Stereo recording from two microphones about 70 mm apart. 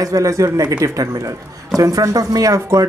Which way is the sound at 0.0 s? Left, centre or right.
Right.